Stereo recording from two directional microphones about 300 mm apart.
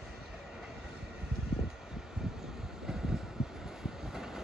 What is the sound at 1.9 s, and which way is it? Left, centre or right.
Vehicle, centre.